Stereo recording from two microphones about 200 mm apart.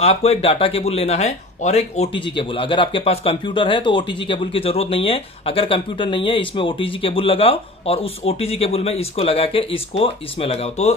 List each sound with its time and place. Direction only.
0.0 s speech: 30° left (ahead or behind)